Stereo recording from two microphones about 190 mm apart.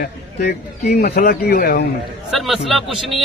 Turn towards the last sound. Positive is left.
turn(degrees=0)  # may be behind; listen again after turning